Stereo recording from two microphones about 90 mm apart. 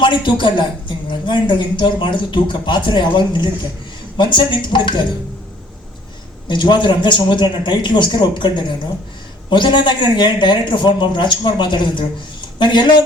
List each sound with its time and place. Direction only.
0.0 s speech: 65° left (ahead or behind)
6.5 s a woman's voice: 60° left (ahead or behind)